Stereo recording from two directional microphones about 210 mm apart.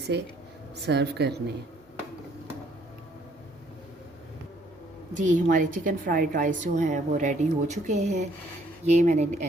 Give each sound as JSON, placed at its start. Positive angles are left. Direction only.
{"t": 0.1, "sound": "a woman's voice", "side_deg": -55}
{"t": 5.1, "sound": "a woman's voice", "side_deg": -35}